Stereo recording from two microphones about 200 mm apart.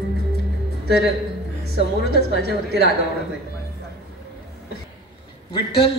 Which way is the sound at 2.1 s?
55° right (ahead or behind).